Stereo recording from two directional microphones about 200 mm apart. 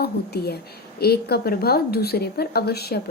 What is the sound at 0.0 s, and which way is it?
Speech, 55° left (ahead or behind).